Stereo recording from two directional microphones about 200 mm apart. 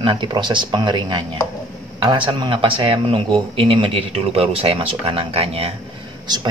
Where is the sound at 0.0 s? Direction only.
25° right (ahead or behind).